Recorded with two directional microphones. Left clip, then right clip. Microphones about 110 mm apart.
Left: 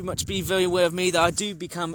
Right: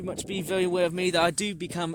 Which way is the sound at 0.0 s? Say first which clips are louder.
Left 4 dB; 10° right (ahead or behind).